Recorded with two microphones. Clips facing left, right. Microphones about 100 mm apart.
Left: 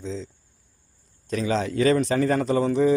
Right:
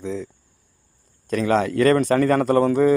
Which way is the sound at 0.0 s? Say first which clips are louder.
Right 4 dB; 60° right (ahead or behind).